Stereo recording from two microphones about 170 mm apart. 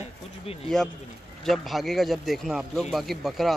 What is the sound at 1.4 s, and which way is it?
A man's voice, centre (ahead or behind).